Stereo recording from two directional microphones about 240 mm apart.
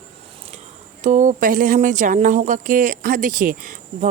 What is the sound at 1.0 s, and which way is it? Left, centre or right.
Speech, right.